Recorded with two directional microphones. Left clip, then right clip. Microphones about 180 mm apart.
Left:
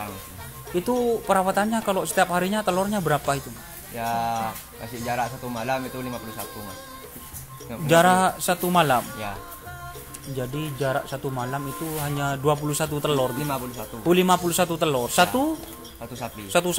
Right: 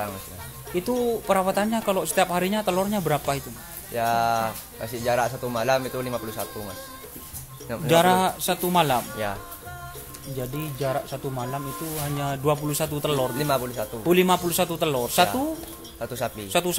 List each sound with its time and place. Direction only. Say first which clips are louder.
0.7 s speech: left 2 dB; centre (ahead or behind)
3.9 s speech: right 4 dB; 50° right (ahead or behind)
6.1 s speech: right 4 dB; centre (ahead or behind)
7.8 s speech: left 1 dB; centre (ahead or behind)
10.2 s speech: left 2 dB; centre (ahead or behind)
16.4 s speech: left 3 dB; centre (ahead or behind)